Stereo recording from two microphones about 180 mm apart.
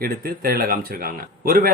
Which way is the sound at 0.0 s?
55° right (ahead or behind).